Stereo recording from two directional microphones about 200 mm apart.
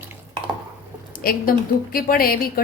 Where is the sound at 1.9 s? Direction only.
45° left (ahead or behind).